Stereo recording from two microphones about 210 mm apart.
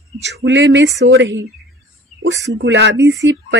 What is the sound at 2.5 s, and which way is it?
Speech, 60° right (ahead or behind).